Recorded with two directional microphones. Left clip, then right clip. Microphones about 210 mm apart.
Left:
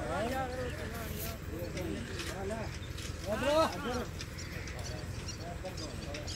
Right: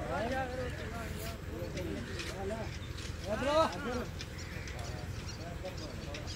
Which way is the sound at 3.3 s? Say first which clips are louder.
Left 1 dB; 35° left (ahead or behind).